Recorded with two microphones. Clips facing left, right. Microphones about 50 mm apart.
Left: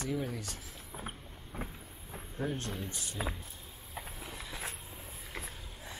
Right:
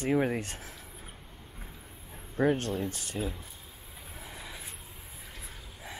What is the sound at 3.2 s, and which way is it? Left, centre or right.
Speech, left.